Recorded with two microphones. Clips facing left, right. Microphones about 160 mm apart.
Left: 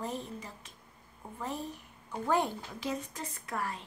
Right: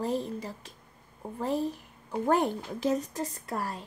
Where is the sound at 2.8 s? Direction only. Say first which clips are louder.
Right 9 dB; 45° right (ahead or behind).